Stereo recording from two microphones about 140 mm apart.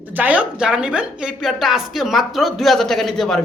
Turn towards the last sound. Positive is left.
turn(degrees=0)  # may be behind; listen again after turning